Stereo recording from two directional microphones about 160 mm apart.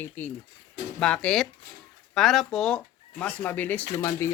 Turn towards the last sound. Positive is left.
turn(degrees=20)  # may be behind; listen again after turning